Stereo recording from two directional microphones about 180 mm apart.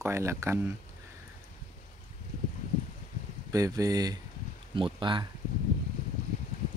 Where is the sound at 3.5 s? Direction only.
20° right (ahead or behind).